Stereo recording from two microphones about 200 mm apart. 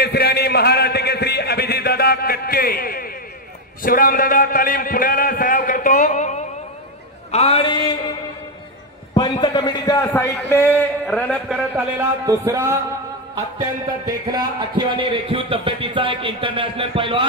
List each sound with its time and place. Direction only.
0.0 s a sound: 50° left (ahead or behind)
3.8 s a man's voice: 45° left (ahead or behind)
7.2 s mantra: 30° left (ahead or behind)
9.1 s a man's voice: 20° left (ahead or behind); by 11.5 s 5° left (ahead or behind)
12.3 s music: 15° right (ahead or behind)
14.0 s speech: 20° right (ahead or behind)